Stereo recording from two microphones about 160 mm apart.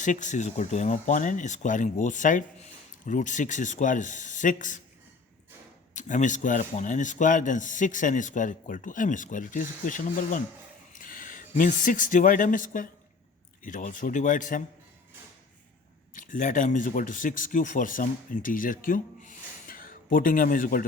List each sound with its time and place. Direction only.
0.0 s speech: 50° left (ahead or behind)
5.9 s speech: 50° left (ahead or behind)
16.1 s speech: 55° left (ahead or behind)